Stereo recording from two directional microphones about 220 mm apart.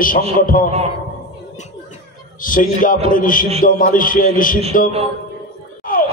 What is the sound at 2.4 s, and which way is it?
A man's voice, 40° left (ahead or behind).